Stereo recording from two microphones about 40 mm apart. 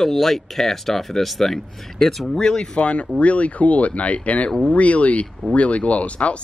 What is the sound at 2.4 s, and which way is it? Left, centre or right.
Speech, centre.